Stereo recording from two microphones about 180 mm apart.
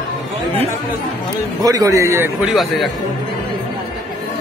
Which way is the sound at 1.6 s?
20° right (ahead or behind).